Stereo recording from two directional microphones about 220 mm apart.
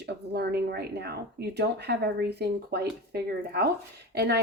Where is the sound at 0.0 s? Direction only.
50° right (ahead or behind).